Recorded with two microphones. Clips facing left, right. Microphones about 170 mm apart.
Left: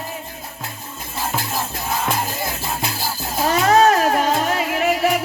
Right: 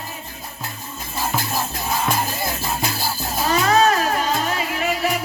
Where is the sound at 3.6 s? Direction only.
50° left (ahead or behind).